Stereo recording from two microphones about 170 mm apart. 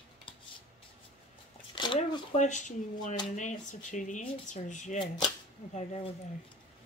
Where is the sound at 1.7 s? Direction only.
25° left (ahead or behind).